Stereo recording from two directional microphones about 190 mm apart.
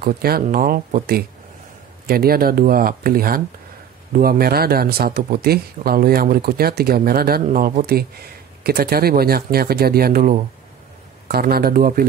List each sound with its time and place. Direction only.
0.0 s speech: 50° right (ahead or behind)